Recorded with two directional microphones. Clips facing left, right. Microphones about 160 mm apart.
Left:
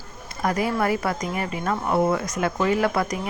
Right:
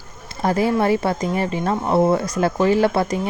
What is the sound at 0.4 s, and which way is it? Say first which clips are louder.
Speech: right 5 dB; 30° right (ahead or behind).